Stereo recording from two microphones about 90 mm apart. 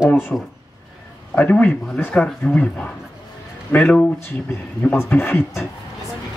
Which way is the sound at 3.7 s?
20° left (ahead or behind).